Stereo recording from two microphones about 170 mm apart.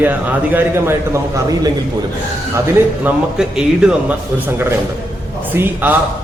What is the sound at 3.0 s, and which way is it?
Speech, 5° right (ahead or behind).